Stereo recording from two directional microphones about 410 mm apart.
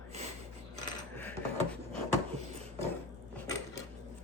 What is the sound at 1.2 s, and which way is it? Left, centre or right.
Cutlery, centre.